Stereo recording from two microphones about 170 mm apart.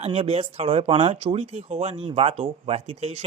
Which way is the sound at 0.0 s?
35° right (ahead or behind).